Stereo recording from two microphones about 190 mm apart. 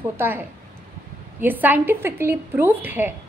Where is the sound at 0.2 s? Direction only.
10° right (ahead or behind).